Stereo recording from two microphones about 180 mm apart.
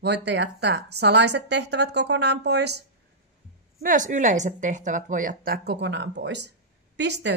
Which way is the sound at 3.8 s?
45° right (ahead or behind).